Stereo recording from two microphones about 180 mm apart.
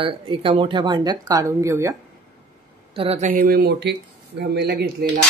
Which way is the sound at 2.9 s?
35° right (ahead or behind).